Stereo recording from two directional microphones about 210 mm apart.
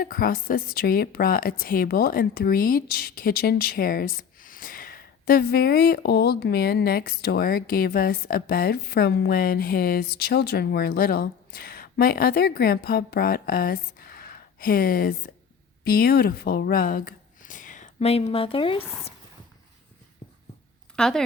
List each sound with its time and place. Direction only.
0.0 s speech: 45° left (ahead or behind); by 18.8 s 25° left (ahead or behind)
20.9 s speech: 5° left (ahead or behind)